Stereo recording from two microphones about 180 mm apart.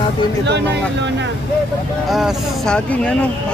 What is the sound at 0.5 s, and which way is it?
Speech, 75° right (ahead or behind).